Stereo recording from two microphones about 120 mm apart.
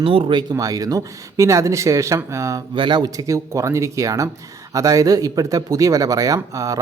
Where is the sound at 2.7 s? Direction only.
40° right (ahead or behind).